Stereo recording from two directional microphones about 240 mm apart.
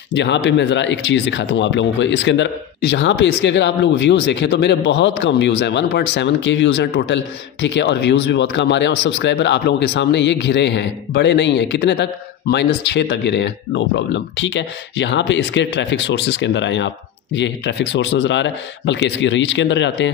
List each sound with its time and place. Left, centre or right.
0.1 s speech: left